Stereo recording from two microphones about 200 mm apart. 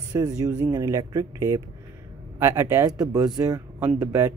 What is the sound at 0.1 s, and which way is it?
Speech, 20° right (ahead or behind).